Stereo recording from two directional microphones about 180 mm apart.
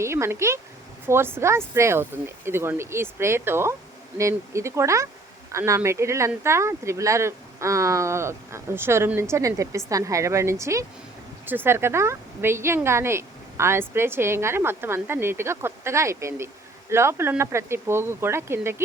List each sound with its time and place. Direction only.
0.0 s speech: 15° right (ahead or behind)